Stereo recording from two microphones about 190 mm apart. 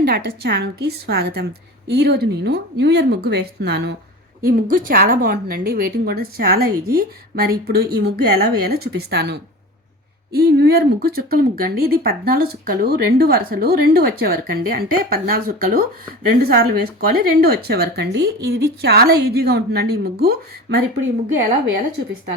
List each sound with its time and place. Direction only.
0.0 s a woman's voice: 55° right (ahead or behind)
4.4 s a woman's voice: 50° right (ahead or behind)